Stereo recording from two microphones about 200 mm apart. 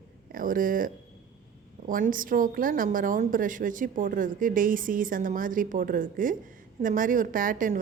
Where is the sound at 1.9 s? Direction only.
45° right (ahead or behind).